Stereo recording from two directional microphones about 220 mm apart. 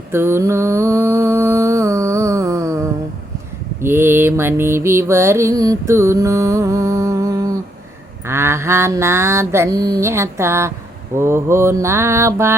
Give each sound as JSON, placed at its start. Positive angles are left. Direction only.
{"t": 0.1, "sound": "mantra", "side_deg": -10}